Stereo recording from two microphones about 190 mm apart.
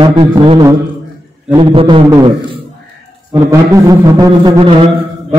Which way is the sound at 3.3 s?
15° right (ahead or behind).